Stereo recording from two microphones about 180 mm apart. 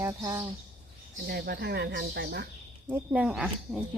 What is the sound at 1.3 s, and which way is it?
Speech, 60° right (ahead or behind).